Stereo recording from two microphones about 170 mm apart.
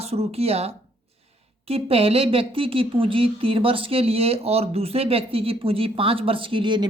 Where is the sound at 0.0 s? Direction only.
35° right (ahead or behind).